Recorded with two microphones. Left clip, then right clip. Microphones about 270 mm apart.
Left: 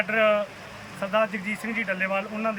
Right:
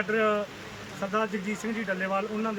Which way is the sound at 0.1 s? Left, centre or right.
Centre.